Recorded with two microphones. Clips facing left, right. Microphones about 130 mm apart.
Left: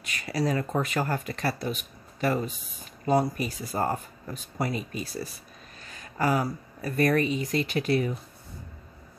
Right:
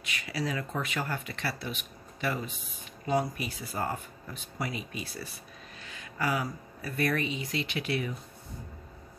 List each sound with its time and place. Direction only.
0.0 s speech: 40° left (ahead or behind)